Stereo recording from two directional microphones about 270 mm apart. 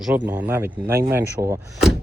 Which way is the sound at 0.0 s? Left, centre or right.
Centre.